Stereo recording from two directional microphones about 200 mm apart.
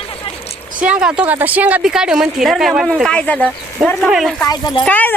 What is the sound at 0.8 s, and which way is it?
A woman's voice, 5° right (ahead or behind).